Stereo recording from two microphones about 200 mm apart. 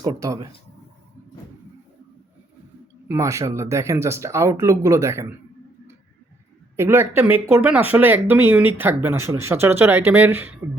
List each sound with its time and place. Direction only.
0.0 s speech: 15° right (ahead or behind)
3.1 s speech: 15° right (ahead or behind)
6.7 s speech: 10° right (ahead or behind)